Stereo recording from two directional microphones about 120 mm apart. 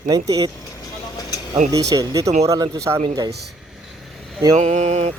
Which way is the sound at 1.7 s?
30° right (ahead or behind).